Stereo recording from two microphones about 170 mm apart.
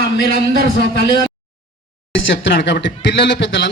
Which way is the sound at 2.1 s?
90° left.